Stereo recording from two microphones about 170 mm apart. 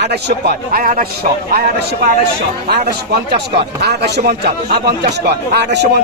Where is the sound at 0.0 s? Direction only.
75° right (ahead or behind); by 1.0 s 55° right (ahead or behind).